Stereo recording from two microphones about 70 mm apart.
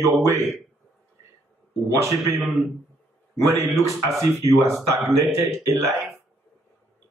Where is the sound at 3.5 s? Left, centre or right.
Right.